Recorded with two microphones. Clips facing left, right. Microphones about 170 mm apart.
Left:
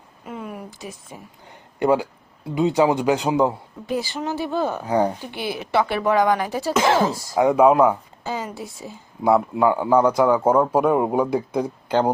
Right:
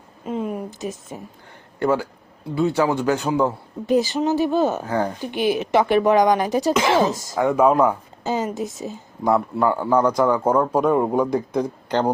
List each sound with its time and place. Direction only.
0.3 s speech: 20° right (ahead or behind)
1.8 s a man's voice: 20° left (ahead or behind)
4.1 s speech: 20° right (ahead or behind)
4.8 s a man's voice: 15° left (ahead or behind)
5.2 s speech: 15° right (ahead or behind)
7.3 s a man's voice: 15° left (ahead or behind)
8.2 s a woman's voice: 20° right (ahead or behind)
8.9 s a man's voice: 10° left (ahead or behind)